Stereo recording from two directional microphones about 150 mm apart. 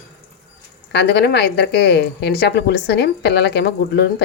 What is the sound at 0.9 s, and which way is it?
Speech, 90° left.